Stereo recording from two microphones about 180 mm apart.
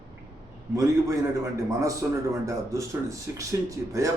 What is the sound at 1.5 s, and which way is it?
A man's voice, 20° right (ahead or behind).